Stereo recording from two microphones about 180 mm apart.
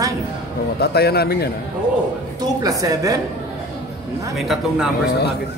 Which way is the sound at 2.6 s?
20° right (ahead or behind).